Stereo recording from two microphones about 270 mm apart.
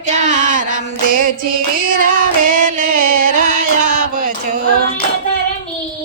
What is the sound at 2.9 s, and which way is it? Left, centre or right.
Music, right.